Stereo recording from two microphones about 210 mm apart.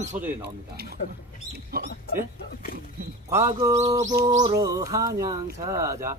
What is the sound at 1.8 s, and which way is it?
Mouse, 45° right (ahead or behind).